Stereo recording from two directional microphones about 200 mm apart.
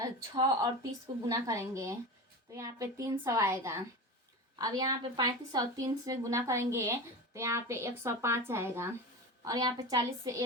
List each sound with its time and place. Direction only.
0.0 s a woman's voice: 20° right (ahead or behind)